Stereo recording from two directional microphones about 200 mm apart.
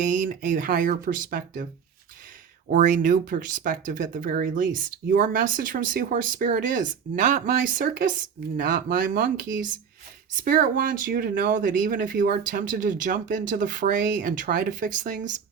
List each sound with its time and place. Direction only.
0.0 s speech: 40° right (ahead or behind)
2.7 s speech: 40° right (ahead or behind)